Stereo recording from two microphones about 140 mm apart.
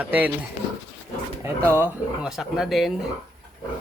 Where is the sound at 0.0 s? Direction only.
15° right (ahead or behind).